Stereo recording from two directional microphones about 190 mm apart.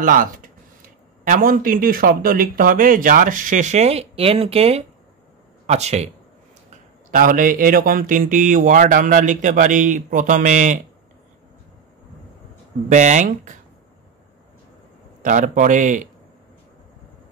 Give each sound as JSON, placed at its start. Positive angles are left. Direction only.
{"t": 0.0, "sound": "speech", "side_deg": -45}
{"t": 7.1, "sound": "speech", "side_deg": -45}
{"t": 12.9, "sound": "speech", "side_deg": -40}
{"t": 15.2, "sound": "speech", "side_deg": -45}